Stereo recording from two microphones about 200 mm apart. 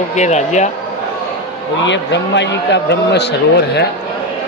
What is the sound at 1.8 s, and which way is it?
Speech, 60° left (ahead or behind).